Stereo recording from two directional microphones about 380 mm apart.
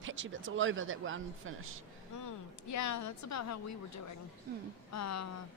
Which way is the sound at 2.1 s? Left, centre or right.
Left.